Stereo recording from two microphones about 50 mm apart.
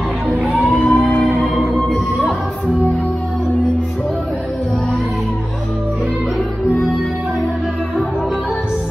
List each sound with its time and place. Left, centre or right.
0.7 s music: left